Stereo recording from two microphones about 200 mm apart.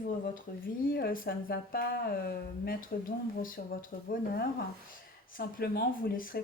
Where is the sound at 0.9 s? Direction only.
45° left (ahead or behind).